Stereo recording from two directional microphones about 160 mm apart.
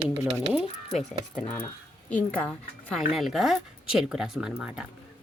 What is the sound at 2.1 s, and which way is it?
Speech, 10° left (ahead or behind).